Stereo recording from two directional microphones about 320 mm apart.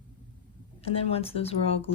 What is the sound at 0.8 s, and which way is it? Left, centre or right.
Speech, centre.